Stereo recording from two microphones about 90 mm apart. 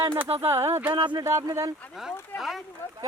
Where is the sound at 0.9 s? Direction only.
60° right (ahead or behind).